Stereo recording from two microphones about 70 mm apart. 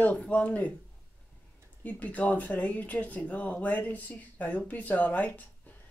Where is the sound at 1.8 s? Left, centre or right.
Left.